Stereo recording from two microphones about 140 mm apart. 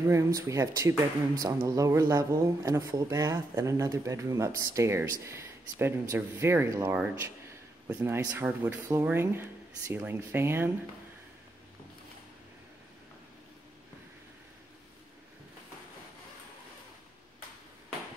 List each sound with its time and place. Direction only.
0.0 s speech: 20° right (ahead or behind)
7.2 s a sound: 15° right (ahead or behind)
8.2 s speech: 20° right (ahead or behind)